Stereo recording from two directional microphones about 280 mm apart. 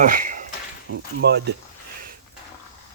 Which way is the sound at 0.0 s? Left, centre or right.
Right.